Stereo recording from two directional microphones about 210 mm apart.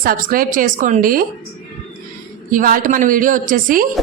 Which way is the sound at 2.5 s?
40° right (ahead or behind).